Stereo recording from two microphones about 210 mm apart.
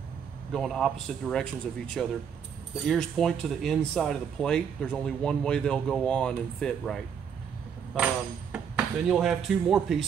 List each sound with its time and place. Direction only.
0.5 s speech: centre (ahead or behind)